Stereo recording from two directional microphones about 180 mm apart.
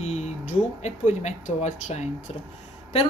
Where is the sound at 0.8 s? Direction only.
40° left (ahead or behind).